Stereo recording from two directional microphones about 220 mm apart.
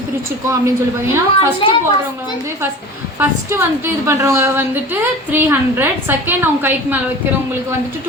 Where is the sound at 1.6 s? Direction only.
25° left (ahead or behind).